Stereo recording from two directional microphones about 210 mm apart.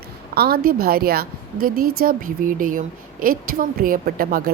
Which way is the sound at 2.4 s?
40° right (ahead or behind).